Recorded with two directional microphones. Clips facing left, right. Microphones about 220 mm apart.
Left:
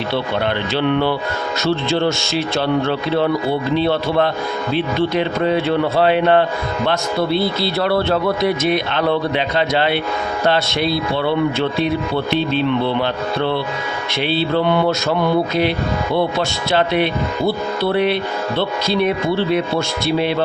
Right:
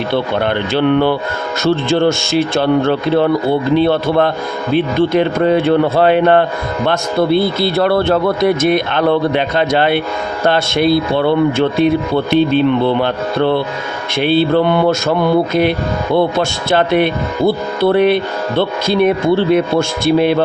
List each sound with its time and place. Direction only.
0.1 s speech: 50° right (ahead or behind)
16.1 s speech: 50° right (ahead or behind)